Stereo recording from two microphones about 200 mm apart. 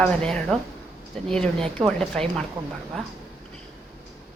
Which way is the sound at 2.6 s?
25° right (ahead or behind).